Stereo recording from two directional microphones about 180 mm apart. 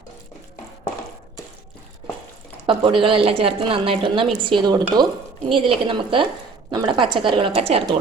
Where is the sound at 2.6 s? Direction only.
30° right (ahead or behind).